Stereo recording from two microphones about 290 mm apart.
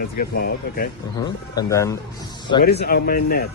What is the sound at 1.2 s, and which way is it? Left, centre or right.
Speech, centre.